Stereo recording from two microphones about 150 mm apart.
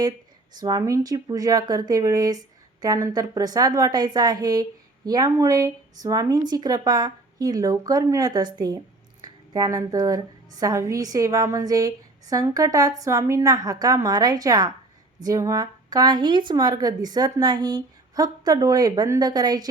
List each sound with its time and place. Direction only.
0.5 s speech: 25° right (ahead or behind)